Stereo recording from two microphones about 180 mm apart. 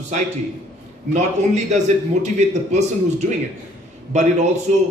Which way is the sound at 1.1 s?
40° right (ahead or behind).